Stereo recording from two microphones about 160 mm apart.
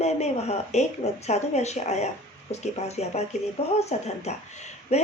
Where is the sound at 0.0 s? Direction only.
40° left (ahead or behind).